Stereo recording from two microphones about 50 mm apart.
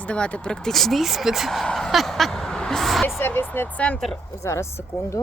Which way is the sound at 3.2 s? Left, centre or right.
Left.